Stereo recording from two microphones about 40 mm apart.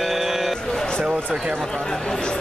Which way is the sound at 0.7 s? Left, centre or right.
Centre.